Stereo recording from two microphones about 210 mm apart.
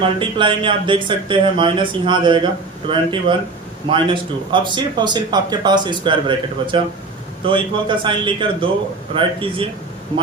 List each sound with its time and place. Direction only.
0.0 s speech: 25° right (ahead or behind)